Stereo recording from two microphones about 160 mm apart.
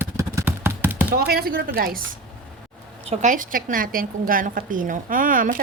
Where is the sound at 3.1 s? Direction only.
50° right (ahead or behind).